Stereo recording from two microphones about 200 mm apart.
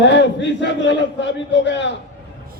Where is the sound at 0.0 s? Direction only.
65° left (ahead or behind).